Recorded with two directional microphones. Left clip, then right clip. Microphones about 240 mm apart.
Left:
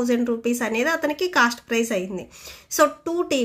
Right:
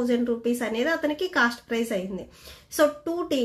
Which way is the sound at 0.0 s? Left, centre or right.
Left.